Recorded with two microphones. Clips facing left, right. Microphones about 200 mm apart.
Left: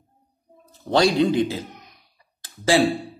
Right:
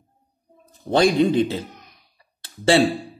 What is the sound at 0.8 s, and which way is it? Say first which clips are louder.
Speech: right 1 dB; 20° right (ahead or behind).